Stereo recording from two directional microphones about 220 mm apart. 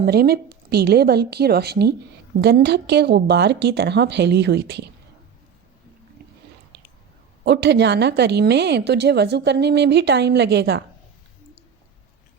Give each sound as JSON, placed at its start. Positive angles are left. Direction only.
{"t": 0.0, "sound": "a woman's voice", "side_deg": -45}
{"t": 7.4, "sound": "a woman's voice", "side_deg": -50}